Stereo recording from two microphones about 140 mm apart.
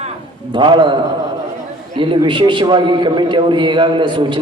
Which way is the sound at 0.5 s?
35° right (ahead or behind).